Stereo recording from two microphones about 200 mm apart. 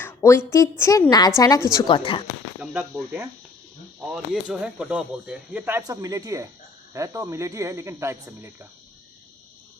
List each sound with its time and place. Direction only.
0.0 s a woman's voice: 10° left (ahead or behind)
2.6 s speech: 5° right (ahead or behind)